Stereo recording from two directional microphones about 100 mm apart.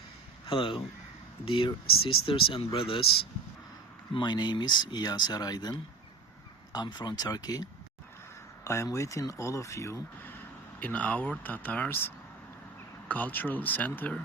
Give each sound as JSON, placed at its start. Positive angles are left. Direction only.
{"t": 0.4, "sound": "speech", "side_deg": 60}
{"t": 4.1, "sound": "speech", "side_deg": 50}
{"t": 10.8, "sound": "speech", "side_deg": 15}